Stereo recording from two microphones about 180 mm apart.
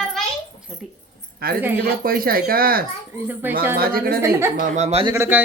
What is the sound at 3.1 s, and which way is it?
Speech, 10° right (ahead or behind).